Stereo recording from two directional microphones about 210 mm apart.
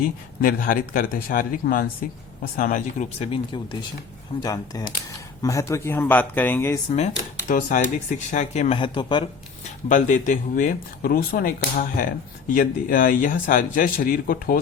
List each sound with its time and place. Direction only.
0.0 s speech: 40° left (ahead or behind); by 6.7 s 10° left (ahead or behind)
6.9 s speech: 35° left (ahead or behind)
9.9 s speech: 40° left (ahead or behind)